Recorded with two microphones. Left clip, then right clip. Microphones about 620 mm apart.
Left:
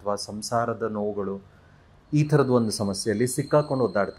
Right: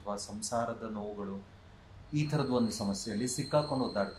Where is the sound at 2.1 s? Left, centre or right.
Left.